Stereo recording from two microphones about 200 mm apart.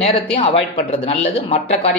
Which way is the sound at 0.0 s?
30° left (ahead or behind).